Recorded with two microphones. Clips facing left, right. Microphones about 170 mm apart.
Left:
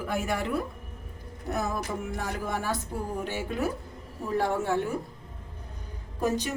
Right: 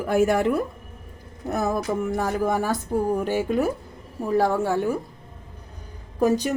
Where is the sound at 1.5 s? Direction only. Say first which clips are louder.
Right 6 dB; 45° right (ahead or behind).